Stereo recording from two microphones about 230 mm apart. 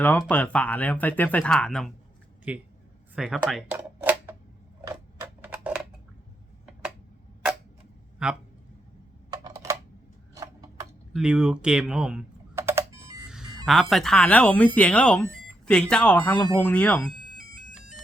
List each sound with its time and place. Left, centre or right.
0.0 s speech: centre
5.4 s a sound: centre
8.2 s speech: centre
9.3 s typing: centre
10.3 s a sound: centre
13.7 s speech: centre